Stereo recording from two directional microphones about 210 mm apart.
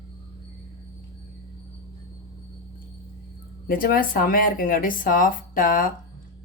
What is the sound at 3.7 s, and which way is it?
Speech, 45° left (ahead or behind).